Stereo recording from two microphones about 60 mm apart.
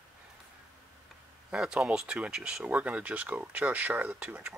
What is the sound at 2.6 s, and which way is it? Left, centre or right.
Speech, right.